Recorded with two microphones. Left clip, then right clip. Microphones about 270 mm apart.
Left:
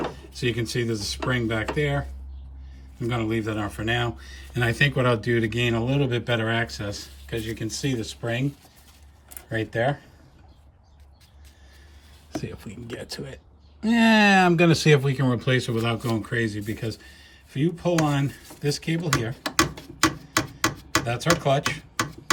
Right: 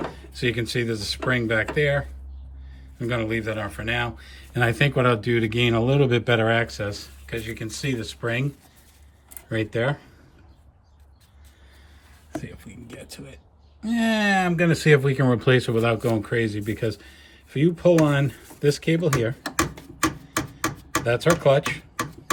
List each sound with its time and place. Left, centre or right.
0.0 s speech: centre
14.4 s speech: centre